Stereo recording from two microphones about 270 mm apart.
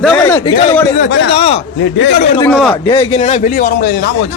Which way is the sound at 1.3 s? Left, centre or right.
Left.